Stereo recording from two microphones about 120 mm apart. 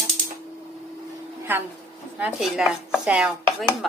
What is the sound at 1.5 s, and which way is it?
Chopping, 15° right (ahead or behind).